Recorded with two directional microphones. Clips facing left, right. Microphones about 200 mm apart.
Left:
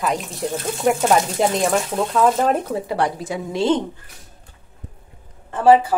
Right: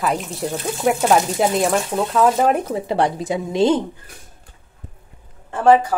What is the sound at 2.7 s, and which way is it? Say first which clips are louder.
Speech: right 2 dB; 25° right (ahead or behind).